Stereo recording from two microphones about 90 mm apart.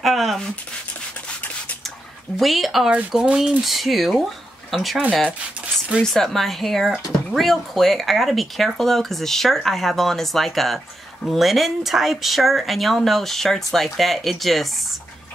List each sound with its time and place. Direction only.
0.0 s speech: centre (ahead or behind)
2.3 s speech: centre (ahead or behind)
6.0 s speech: 5° left (ahead or behind)